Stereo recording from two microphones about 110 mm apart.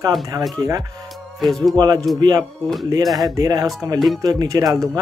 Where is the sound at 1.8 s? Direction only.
35° right (ahead or behind).